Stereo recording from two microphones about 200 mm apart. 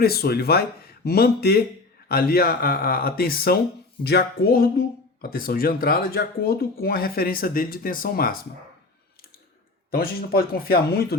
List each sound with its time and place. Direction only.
0.0 s speech: 50° left (ahead or behind)
9.9 s speech: 50° left (ahead or behind)